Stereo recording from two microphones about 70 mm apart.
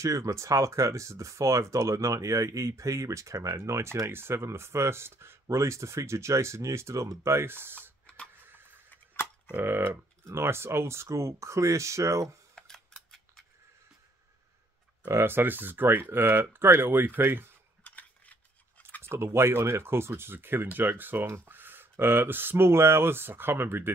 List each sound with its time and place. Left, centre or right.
0.0 s speech: right
9.5 s speech: right
12.5 s a sound: centre
15.0 s speech: right
17.8 s a sound: left
19.0 s speech: right